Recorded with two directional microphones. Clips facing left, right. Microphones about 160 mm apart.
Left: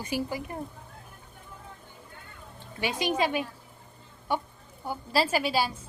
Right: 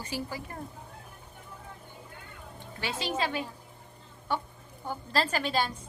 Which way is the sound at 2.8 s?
15° left (ahead or behind).